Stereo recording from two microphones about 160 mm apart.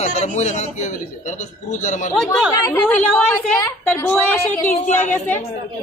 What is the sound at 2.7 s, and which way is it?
A woman's voice, 15° left (ahead or behind).